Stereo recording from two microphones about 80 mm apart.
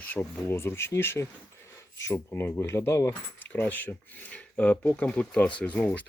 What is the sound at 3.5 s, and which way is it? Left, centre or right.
Speech, left.